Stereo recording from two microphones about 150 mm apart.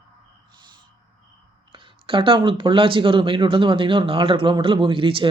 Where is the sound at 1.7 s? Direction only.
35° right (ahead or behind).